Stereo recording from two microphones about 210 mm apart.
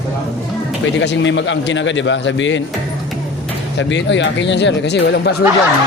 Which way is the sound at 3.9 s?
60° left (ahead or behind).